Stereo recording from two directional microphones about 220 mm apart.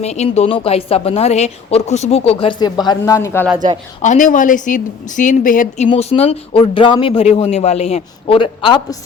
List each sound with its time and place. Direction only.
0.0 s a woman's voice: 30° left (ahead or behind); by 3.4 s 15° left (ahead or behind)
4.0 s a woman's voice: 35° left (ahead or behind)